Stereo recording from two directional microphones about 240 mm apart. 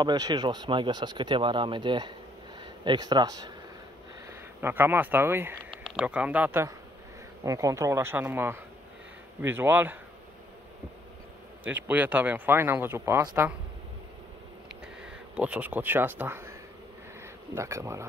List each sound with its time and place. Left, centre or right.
0.0 s speech: centre
4.6 s speech: centre
11.6 s speech: centre
15.3 s speech: centre
17.6 s speech: centre